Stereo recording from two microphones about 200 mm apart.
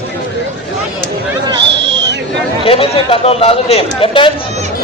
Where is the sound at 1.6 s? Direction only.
60° right (ahead or behind).